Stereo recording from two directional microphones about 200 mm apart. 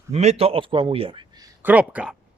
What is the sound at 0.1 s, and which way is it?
A man's voice, 30° right (ahead or behind).